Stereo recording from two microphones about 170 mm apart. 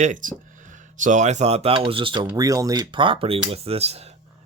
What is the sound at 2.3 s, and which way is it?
Speech, 20° right (ahead or behind).